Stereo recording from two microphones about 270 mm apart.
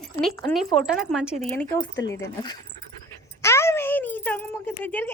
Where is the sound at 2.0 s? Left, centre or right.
Centre.